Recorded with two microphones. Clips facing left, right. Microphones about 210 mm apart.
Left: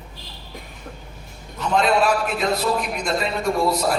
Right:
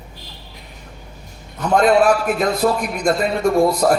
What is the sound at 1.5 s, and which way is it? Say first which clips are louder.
A man's voice: right 5 dB; 50° right (ahead or behind).